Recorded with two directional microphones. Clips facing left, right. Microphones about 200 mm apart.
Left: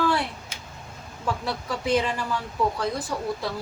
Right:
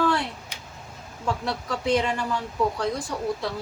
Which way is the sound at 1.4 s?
5° left (ahead or behind).